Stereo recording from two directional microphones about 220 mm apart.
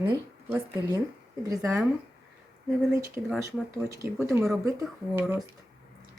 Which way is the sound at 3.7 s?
15° right (ahead or behind).